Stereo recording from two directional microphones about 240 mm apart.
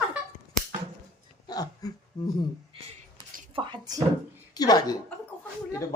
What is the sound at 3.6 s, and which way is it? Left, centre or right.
Speech, centre.